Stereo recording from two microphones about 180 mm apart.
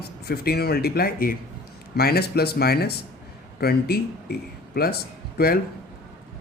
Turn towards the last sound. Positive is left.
turn(degrees=60)  # may be behind; listen again after turning